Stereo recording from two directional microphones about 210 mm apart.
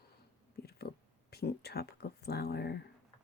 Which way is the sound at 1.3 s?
50° left (ahead or behind).